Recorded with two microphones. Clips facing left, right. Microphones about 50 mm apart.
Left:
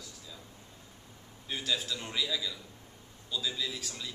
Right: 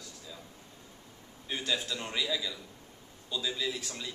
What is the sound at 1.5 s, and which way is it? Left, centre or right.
Speech, centre.